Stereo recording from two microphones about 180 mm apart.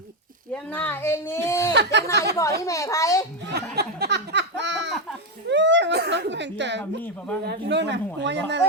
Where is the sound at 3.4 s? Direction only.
65° right (ahead or behind).